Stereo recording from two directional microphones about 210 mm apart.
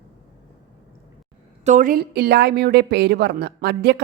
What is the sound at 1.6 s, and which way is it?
Speech, 35° right (ahead or behind).